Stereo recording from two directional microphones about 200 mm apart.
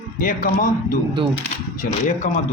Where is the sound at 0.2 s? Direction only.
40° left (ahead or behind).